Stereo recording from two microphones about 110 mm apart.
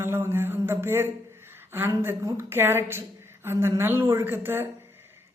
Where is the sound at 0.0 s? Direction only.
20° right (ahead or behind).